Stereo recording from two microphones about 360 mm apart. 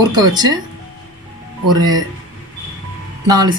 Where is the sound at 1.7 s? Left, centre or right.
Centre.